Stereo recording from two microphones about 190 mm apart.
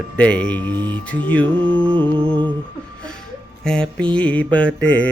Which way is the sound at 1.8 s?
25° right (ahead or behind).